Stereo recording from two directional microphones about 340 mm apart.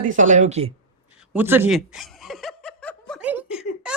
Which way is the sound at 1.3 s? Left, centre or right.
Centre.